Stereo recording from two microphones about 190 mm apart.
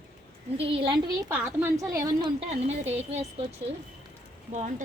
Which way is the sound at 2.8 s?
35° right (ahead or behind).